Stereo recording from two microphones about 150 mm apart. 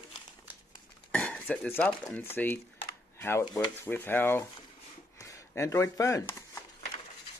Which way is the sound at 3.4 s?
30° left (ahead or behind).